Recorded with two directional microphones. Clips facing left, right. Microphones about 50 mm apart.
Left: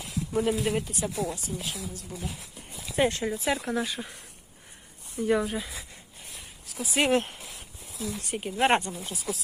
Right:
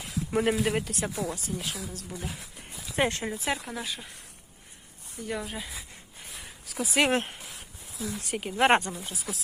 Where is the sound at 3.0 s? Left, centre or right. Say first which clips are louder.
Left 2 dB; right.